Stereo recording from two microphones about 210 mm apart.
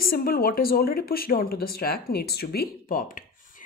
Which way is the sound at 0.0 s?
45° left (ahead or behind).